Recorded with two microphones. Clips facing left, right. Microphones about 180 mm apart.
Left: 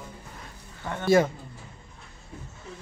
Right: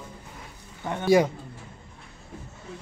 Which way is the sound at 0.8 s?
15° right (ahead or behind).